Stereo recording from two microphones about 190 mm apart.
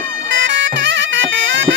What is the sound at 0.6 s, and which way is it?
Bagpipes, 75° right (ahead or behind).